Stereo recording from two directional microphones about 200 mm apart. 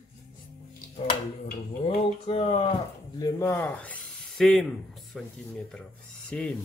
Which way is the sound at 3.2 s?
15° left (ahead or behind).